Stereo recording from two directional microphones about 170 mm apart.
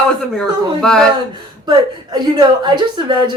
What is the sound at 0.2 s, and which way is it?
Speech, 5° left (ahead or behind).